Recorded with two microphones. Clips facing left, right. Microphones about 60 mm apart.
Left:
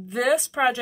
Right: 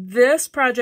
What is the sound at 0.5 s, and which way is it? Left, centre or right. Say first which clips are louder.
Speech: right 3 dB; right.